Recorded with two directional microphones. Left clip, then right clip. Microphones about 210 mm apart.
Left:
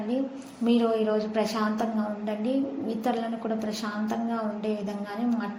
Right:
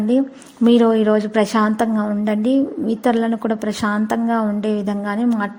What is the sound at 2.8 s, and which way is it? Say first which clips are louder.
A woman's voice: right 10 dB; 45° right (ahead or behind).